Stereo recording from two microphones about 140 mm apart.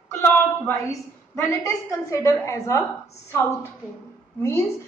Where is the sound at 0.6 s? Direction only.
20° left (ahead or behind).